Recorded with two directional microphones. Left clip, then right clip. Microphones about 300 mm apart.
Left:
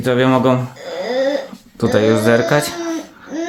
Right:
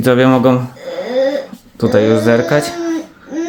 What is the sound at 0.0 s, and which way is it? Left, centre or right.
Speech, centre.